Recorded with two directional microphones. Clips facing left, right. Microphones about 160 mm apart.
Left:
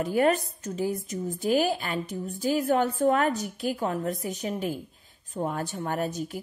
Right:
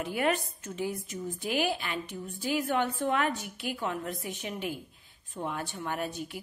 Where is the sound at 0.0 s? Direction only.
40° left (ahead or behind).